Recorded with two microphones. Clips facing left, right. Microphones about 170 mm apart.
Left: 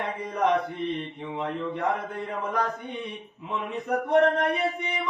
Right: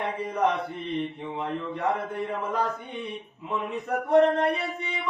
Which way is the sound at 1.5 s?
15° left (ahead or behind).